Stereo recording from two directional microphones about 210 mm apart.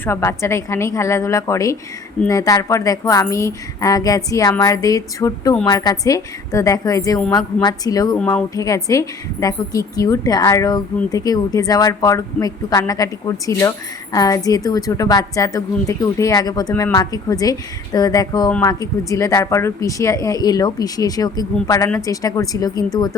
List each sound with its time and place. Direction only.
0.0 s a woman's voice: 10° left (ahead or behind)
8.2 s speech: 5° left (ahead or behind)
8.5 s a woman's voice: 15° left (ahead or behind)